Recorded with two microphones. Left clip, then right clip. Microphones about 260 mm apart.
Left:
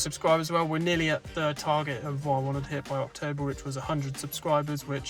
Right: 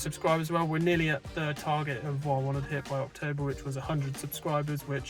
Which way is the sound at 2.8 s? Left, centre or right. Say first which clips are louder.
Left 4 dB; centre.